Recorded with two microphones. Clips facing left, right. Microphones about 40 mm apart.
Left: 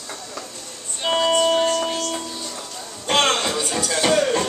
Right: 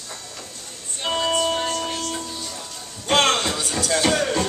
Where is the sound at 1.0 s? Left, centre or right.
Centre.